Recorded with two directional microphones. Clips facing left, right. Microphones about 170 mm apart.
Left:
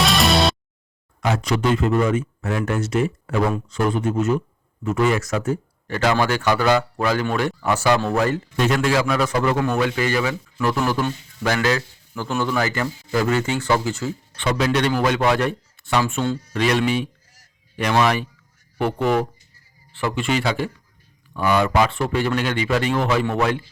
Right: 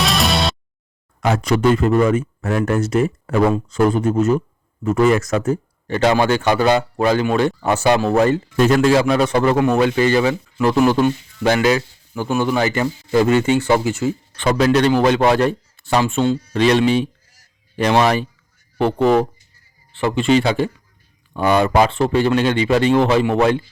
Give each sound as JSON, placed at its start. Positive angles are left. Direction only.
{"t": 0.0, "sound": "music", "side_deg": 0}
{"t": 1.2, "sound": "speech", "side_deg": -50}
{"t": 5.9, "sound": "a man's voice", "side_deg": -25}
{"t": 8.5, "sound": "a man's voice", "side_deg": -40}
{"t": 14.3, "sound": "a man's voice", "side_deg": -40}